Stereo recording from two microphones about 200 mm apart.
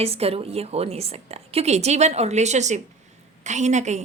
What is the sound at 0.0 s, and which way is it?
A woman's voice, 30° right (ahead or behind).